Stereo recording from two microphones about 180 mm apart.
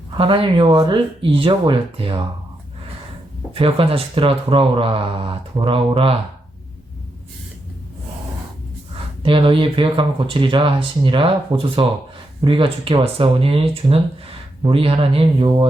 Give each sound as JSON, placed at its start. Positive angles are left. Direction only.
{"t": 0.2, "sound": "speech", "side_deg": -30}
{"t": 3.5, "sound": "speech", "side_deg": -30}
{"t": 9.2, "sound": "speech", "side_deg": -30}